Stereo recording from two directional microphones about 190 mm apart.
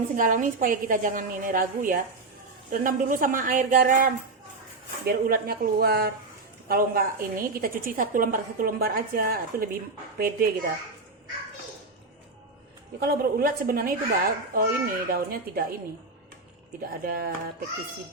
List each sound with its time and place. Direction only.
0.2 s speech: 45° right (ahead or behind)
13.0 s speech: 50° right (ahead or behind)
17.0 s speech: 50° right (ahead or behind)